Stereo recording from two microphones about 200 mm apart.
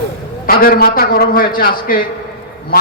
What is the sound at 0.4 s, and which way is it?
A man's voice, 45° left (ahead or behind).